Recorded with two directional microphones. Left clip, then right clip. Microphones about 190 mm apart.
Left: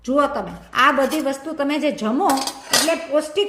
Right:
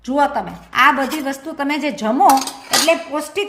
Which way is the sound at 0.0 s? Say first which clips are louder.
Right 2 dB; 40° right (ahead or behind).